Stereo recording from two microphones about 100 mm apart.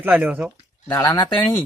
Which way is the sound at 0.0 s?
15° right (ahead or behind).